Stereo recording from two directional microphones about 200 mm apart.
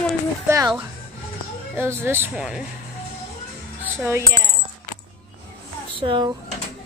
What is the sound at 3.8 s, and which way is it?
Music, 10° right (ahead or behind).